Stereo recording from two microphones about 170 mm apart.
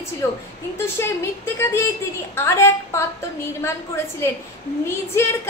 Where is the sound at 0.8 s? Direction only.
15° left (ahead or behind).